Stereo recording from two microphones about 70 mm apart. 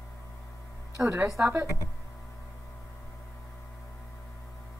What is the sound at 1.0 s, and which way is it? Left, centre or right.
Speech, right.